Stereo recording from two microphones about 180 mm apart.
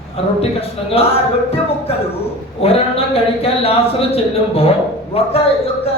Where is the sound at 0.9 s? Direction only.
30° left (ahead or behind).